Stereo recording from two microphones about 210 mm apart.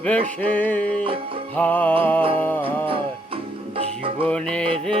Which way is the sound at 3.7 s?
25° right (ahead or behind).